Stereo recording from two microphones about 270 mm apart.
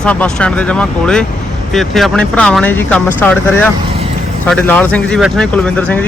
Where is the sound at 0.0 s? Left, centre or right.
Centre.